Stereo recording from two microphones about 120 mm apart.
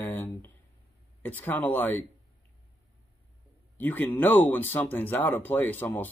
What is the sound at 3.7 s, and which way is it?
Speech, 15° left (ahead or behind).